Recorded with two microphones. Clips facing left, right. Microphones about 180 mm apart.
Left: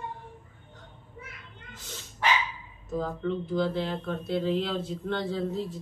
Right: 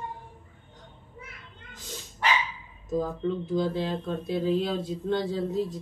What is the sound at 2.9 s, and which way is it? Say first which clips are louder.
Speech: right 2 dB; 20° right (ahead or behind).